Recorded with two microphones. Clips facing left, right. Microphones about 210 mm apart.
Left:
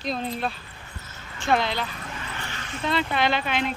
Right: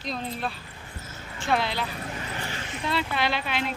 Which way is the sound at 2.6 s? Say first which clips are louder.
Even; 20° right (ahead or behind).